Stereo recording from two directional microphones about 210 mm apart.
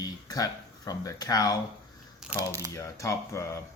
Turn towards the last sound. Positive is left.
turn(degrees=15)  # may be behind; listen again after turning